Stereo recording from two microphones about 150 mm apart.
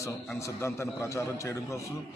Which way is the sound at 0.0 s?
20° left (ahead or behind).